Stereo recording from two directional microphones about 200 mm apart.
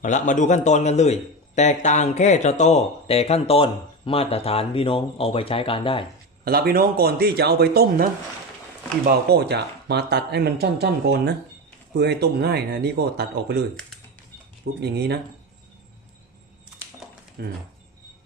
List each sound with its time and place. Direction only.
0.0 s a man's voice: 40° left (ahead or behind)
6.4 s speech: 50° right (ahead or behind)
9.0 s speech: 55° right (ahead or behind)
14.8 s speech: 55° right (ahead or behind)
17.4 s speech: 50° right (ahead or behind)